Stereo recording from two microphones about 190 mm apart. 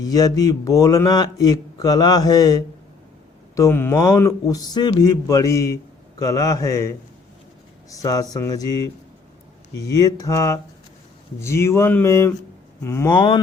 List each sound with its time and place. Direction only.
0.0 s a man's voice: 20° left (ahead or behind)